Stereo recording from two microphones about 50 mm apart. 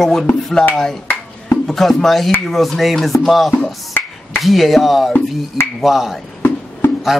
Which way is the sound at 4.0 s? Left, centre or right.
Left.